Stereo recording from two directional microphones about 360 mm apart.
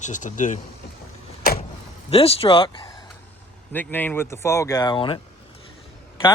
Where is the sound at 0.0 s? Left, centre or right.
Left.